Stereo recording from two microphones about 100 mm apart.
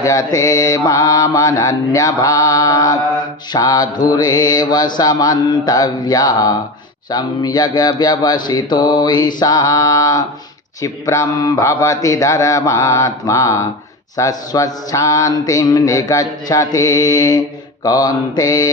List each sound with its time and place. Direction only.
0.0 s mantra: 35° left (ahead or behind)
7.1 s speech: 45° left (ahead or behind)
8.0 s mantra: 40° left (ahead or behind)